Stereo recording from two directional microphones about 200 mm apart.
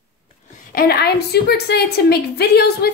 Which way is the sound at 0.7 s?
50° left (ahead or behind).